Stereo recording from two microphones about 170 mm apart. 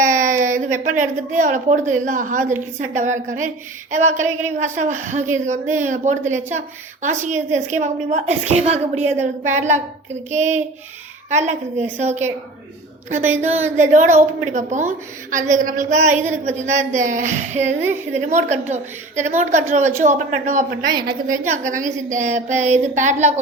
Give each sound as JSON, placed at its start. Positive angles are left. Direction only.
{"t": 0.1, "sound": "a woman's voice", "side_deg": -45}
{"t": 13.7, "sound": "a woman's voice", "side_deg": -45}
{"t": 21.3, "sound": "a woman's voice", "side_deg": -45}